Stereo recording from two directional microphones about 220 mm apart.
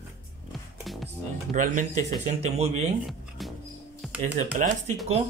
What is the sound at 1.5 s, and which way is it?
Speech, 35° right (ahead or behind).